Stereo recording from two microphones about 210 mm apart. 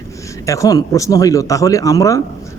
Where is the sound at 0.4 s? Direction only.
15° left (ahead or behind).